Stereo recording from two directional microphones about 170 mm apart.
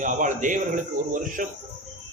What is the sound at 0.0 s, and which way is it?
A man's voice, 50° right (ahead or behind).